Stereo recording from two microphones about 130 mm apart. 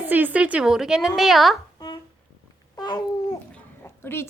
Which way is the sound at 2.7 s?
30° left (ahead or behind).